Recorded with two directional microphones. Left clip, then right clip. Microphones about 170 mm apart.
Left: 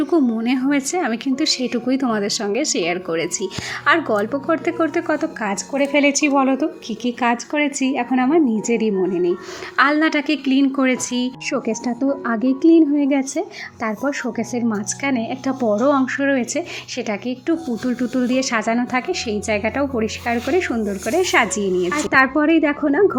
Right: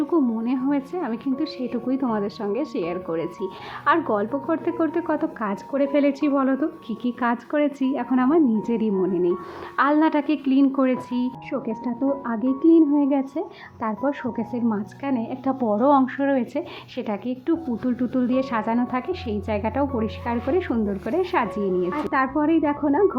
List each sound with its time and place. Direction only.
0.1 s a woman's voice: 20° left (ahead or behind)
11.5 s a woman's voice: 25° left (ahead or behind)
14.7 s a woman's voice: 25° left (ahead or behind)